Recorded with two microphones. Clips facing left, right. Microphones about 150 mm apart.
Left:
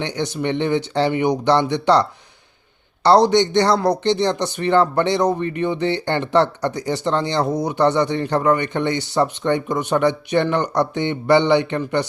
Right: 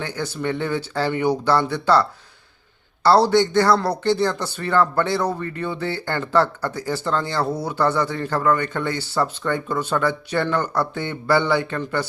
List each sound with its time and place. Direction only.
0.0 s speech: 20° left (ahead or behind)